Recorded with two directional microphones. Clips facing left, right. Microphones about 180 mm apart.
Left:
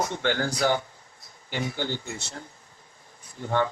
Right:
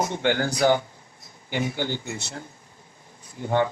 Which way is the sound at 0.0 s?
15° right (ahead or behind).